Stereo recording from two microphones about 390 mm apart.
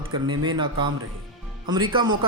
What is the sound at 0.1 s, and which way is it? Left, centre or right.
Speech, centre.